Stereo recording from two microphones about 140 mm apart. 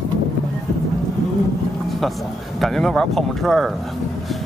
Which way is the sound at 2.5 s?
Centre (ahead or behind).